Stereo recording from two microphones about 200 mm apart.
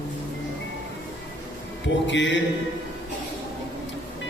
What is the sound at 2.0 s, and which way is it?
Speech, 65° left (ahead or behind).